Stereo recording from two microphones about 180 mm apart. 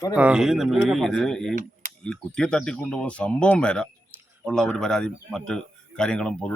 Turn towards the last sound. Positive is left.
turn(degrees=5)  # may be behind; listen again after turning